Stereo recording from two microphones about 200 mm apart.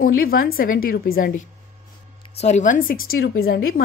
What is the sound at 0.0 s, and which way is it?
A woman's voice, 45° left (ahead or behind).